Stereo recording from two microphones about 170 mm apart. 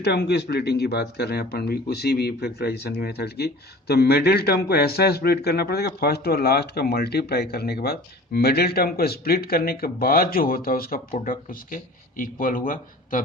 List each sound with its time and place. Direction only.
0.0 s speech: 75° left (ahead or behind); by 13.2 s 55° left (ahead or behind)